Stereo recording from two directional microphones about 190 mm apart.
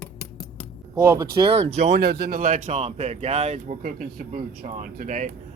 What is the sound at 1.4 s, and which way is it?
Speech, 25° right (ahead or behind).